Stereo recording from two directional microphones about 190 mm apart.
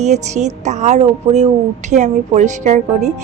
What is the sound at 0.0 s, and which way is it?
A woman's voice, 35° right (ahead or behind).